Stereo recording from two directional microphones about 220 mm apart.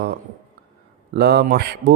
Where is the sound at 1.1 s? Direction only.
45° right (ahead or behind).